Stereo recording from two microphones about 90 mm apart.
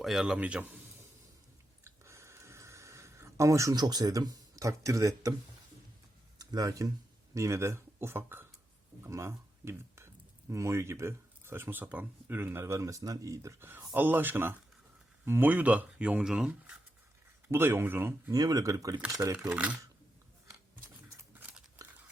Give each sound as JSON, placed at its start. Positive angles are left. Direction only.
{"t": 0.0, "sound": "a man's voice", "side_deg": -5}
{"t": 0.3, "sound": "speech", "side_deg": -15}
{"t": 1.8, "sound": "a sound", "side_deg": -30}
{"t": 3.8, "sound": "speech", "side_deg": -50}
{"t": 6.4, "sound": "speech", "side_deg": -45}
{"t": 17.5, "sound": "speech", "side_deg": -25}
{"t": 18.3, "sound": "speech", "side_deg": -40}
{"t": 19.4, "sound": "speech", "side_deg": -10}
{"t": 21.3, "sound": "scissors", "side_deg": -15}